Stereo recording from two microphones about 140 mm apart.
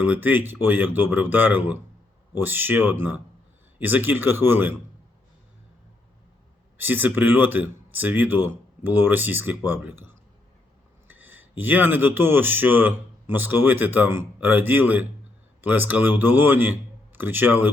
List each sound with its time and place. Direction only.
0.0 s speech: 10° right (ahead or behind)
6.7 s speech: 15° right (ahead or behind)